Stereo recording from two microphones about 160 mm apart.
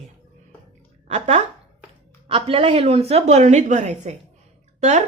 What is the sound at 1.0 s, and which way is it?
A woman's voice, 40° right (ahead or behind).